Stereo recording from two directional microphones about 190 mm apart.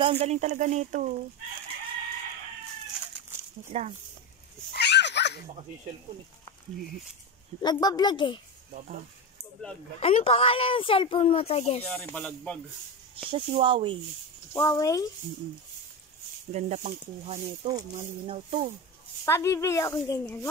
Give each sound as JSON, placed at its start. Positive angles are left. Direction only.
{"t": 0.0, "sound": "speech", "side_deg": -35}
{"t": 3.7, "sound": "speech", "side_deg": -30}
{"t": 4.7, "sound": "a sound", "side_deg": 65}
{"t": 7.6, "sound": "speech", "side_deg": 20}
{"t": 9.9, "sound": "speech", "side_deg": 30}
{"t": 11.8, "sound": "speech", "side_deg": 10}
{"t": 13.1, "sound": "speech", "side_deg": -30}
{"t": 14.5, "sound": "speech", "side_deg": 15}
{"t": 16.5, "sound": "speech", "side_deg": -40}
{"t": 17.7, "sound": "speech", "side_deg": -25}
{"t": 19.2, "sound": "speech", "side_deg": 15}